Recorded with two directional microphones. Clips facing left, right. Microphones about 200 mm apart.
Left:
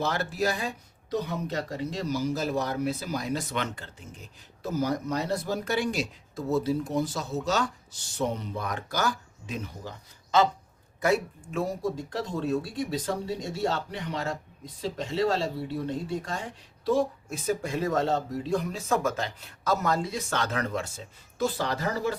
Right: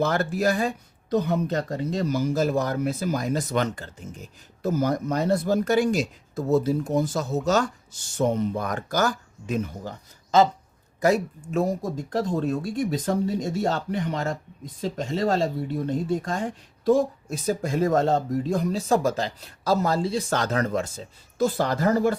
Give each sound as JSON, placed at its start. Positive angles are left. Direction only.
{"t": 0.0, "sound": "speech", "side_deg": -50}
{"t": 11.0, "sound": "speech", "side_deg": -40}